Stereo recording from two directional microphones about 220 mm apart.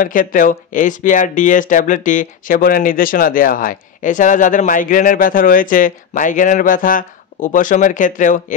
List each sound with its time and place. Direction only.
0.0 s speech: 35° left (ahead or behind)